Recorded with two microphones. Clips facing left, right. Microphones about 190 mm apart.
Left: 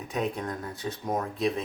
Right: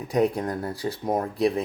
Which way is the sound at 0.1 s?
35° right (ahead or behind).